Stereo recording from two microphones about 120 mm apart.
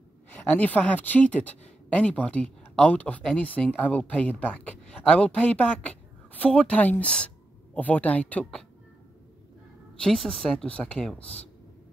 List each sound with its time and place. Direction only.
0.3 s speech: 15° left (ahead or behind)
9.9 s speech: 5° left (ahead or behind)